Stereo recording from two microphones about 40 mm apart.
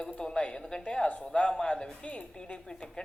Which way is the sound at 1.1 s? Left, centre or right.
Left.